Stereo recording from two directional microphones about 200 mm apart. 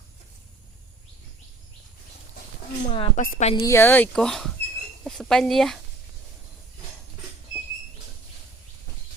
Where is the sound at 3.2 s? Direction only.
40° left (ahead or behind).